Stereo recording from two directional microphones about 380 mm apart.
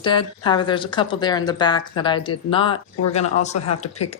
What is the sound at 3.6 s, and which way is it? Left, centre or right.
Speech, left.